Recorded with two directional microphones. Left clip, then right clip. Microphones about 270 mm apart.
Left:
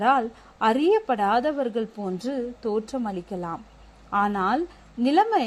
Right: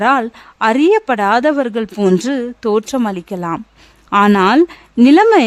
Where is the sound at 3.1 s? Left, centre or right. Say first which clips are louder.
Right 10 dB; right.